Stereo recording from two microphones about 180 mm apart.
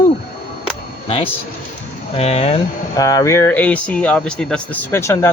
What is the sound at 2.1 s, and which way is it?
Speech, 35° left (ahead or behind).